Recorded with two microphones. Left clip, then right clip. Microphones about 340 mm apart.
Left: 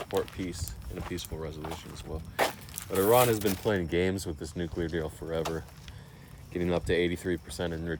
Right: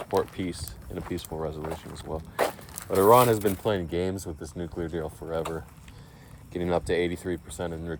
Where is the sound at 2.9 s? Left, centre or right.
Centre.